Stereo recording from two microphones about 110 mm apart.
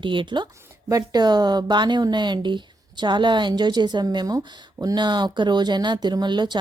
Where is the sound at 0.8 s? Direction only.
35° right (ahead or behind).